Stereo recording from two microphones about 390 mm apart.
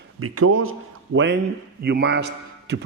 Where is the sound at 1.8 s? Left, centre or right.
Right.